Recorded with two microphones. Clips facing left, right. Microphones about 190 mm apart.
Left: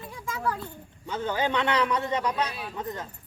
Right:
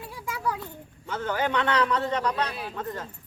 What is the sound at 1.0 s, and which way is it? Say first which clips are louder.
A man's voice: even; 20° left (ahead or behind).